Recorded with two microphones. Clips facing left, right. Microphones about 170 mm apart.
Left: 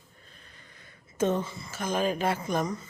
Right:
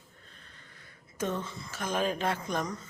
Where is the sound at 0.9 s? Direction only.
25° left (ahead or behind).